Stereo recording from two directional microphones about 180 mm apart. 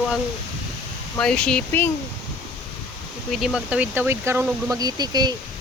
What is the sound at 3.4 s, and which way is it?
Speech, 5° right (ahead or behind).